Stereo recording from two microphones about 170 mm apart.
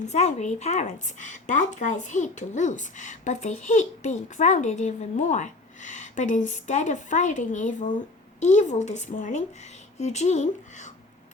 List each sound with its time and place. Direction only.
0.0 s speech: 40° left (ahead or behind)